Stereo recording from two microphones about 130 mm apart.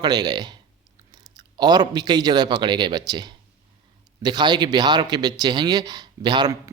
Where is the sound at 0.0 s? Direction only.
30° right (ahead or behind).